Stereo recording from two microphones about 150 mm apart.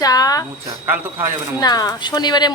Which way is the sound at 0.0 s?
25° left (ahead or behind).